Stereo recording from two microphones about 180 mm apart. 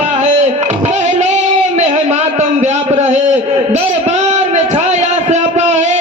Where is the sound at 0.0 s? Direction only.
35° right (ahead or behind).